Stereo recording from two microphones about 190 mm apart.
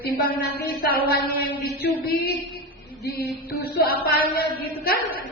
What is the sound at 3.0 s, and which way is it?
Music, 60° left (ahead or behind).